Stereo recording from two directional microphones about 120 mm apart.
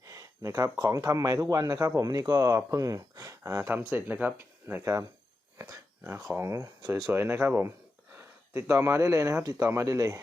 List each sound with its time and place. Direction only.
0.1 s speech: 25° right (ahead or behind)